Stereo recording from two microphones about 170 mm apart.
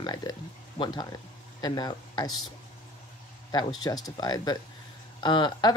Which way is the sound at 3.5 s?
25° left (ahead or behind).